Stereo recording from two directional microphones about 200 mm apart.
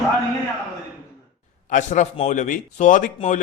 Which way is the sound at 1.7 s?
35° left (ahead or behind).